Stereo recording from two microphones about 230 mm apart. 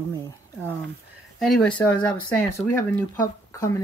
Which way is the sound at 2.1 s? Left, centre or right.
Centre.